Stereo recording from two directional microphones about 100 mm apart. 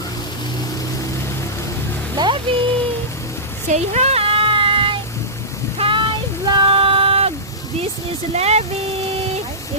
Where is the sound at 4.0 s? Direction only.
90° right; by 5.0 s 60° right (ahead or behind).